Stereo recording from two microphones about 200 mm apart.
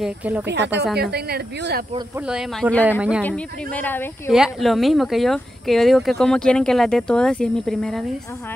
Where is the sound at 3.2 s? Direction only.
5° left (ahead or behind).